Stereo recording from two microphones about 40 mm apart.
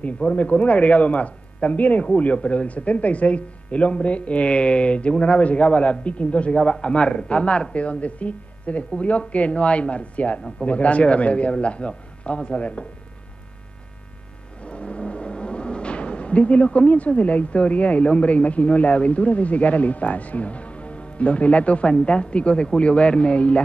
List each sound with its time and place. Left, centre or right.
0.2 s speech: left
14.6 s speech: left